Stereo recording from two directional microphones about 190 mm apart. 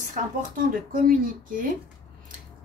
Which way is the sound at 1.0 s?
45° right (ahead or behind).